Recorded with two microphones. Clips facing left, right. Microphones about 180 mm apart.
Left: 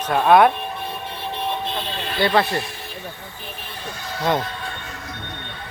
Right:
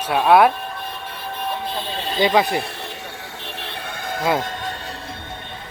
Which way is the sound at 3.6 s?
55° right (ahead or behind).